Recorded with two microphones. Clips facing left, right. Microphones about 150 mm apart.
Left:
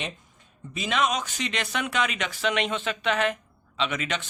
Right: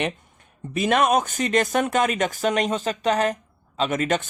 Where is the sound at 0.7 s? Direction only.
55° right (ahead or behind).